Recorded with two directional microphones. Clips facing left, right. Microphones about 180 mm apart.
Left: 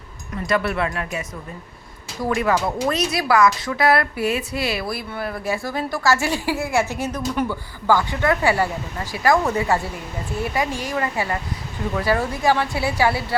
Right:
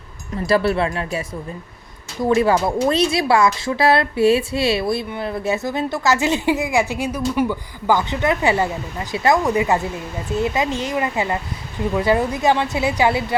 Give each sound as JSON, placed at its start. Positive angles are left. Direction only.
{"t": 0.3, "sound": "speech", "side_deg": -30}
{"t": 2.2, "sound": "speech", "side_deg": -25}